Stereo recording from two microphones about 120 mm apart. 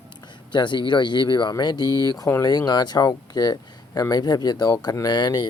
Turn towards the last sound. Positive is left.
turn(degrees=35)  # may be behind; listen again after turning